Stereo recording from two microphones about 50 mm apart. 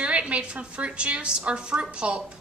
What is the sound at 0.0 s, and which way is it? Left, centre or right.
A woman's voice, right.